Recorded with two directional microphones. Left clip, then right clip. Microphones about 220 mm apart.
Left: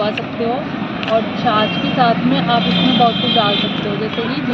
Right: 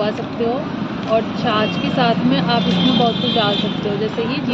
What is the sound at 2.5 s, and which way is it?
Speech, centre (ahead or behind).